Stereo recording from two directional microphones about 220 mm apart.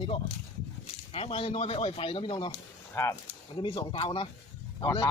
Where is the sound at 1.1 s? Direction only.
25° left (ahead or behind).